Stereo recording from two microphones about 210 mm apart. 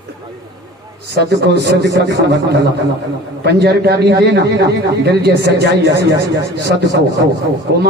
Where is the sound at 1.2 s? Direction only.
50° right (ahead or behind).